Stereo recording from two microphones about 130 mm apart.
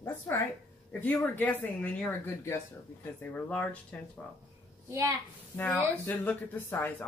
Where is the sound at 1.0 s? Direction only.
15° left (ahead or behind).